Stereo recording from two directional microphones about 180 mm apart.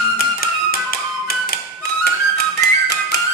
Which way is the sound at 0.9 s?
55° left (ahead or behind).